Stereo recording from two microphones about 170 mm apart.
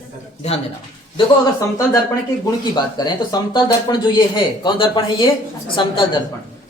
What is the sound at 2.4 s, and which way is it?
Speech, 20° left (ahead or behind).